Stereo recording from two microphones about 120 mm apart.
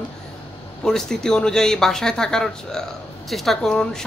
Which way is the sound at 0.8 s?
5° left (ahead or behind).